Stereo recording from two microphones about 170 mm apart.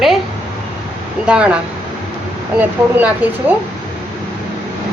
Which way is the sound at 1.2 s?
5° right (ahead or behind).